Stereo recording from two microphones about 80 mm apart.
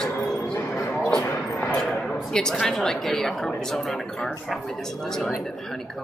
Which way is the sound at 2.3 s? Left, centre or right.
Centre.